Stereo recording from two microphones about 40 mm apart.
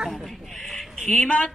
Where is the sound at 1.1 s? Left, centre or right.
Left.